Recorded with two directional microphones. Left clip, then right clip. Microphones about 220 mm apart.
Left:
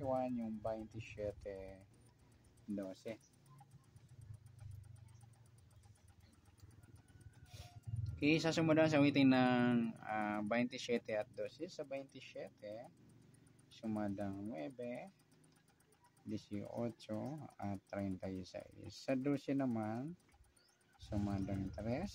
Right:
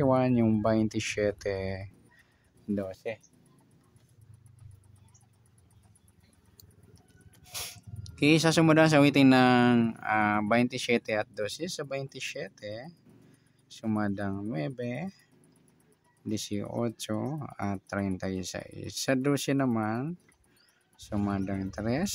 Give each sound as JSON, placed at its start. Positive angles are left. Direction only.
{"t": 0.0, "sound": "speech", "side_deg": -50}
{"t": 8.2, "sound": "speech", "side_deg": -35}
{"t": 16.3, "sound": "speech", "side_deg": -35}
{"t": 21.1, "sound": "speech", "side_deg": -35}